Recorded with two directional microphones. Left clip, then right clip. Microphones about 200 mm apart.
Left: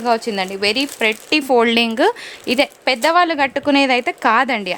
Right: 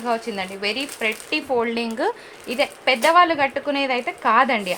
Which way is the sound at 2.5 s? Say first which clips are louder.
Left 3 dB; 65° left (ahead or behind).